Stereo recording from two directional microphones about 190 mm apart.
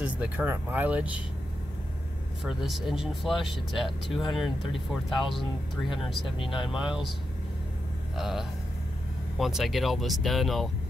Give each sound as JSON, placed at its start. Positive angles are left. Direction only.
{"t": 0.0, "sound": "speech", "side_deg": -5}
{"t": 2.4, "sound": "speech", "side_deg": 0}
{"t": 6.2, "sound": "speech", "side_deg": 25}
{"t": 6.7, "sound": "speech", "side_deg": -5}
{"t": 8.2, "sound": "speech", "side_deg": 0}